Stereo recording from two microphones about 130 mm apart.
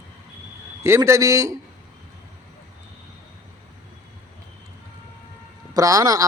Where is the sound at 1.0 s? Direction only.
25° right (ahead or behind).